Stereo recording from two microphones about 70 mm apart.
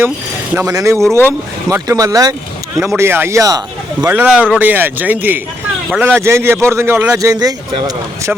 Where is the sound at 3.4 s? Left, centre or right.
Right.